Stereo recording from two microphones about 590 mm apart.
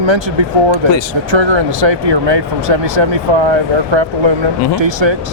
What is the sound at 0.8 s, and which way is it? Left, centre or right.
Speech, right.